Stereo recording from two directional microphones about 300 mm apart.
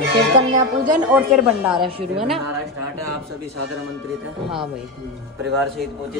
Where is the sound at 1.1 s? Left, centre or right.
Centre.